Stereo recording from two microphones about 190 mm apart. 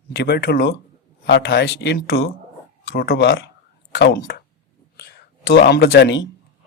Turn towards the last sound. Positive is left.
turn(degrees=70)  # may be behind; listen again after turning